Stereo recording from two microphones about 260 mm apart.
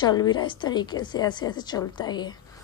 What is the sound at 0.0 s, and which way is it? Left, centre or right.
A woman's voice, centre.